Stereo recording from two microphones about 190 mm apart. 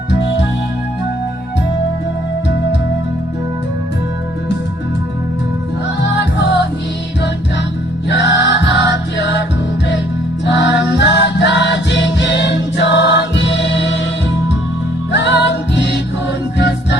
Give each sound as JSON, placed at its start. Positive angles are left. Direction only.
{"t": 8.1, "sound": "music", "side_deg": 65}
{"t": 10.4, "sound": "music", "side_deg": 70}
{"t": 15.1, "sound": "music", "side_deg": 65}